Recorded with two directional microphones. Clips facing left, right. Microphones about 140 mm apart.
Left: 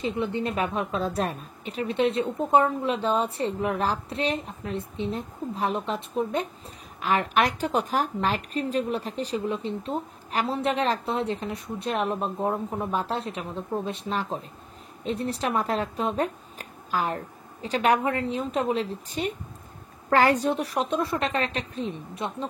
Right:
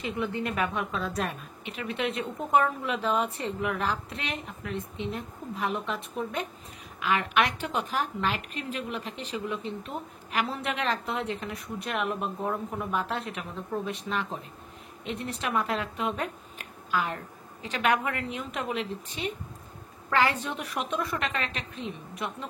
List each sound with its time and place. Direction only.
0.0 s speech: 30° left (ahead or behind)